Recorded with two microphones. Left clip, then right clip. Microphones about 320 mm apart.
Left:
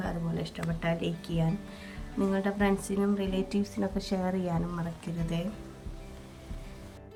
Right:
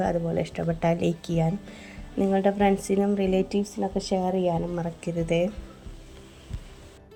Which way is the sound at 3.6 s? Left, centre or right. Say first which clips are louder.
Right 5 dB; left.